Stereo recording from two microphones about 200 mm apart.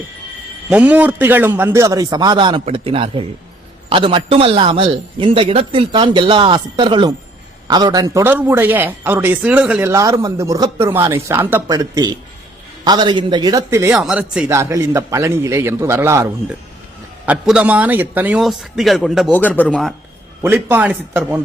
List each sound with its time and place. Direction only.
0.7 s a man's voice: 5° right (ahead or behind)
13.9 s a man's voice: 5° right (ahead or behind)
20.4 s a man's voice: 10° right (ahead or behind)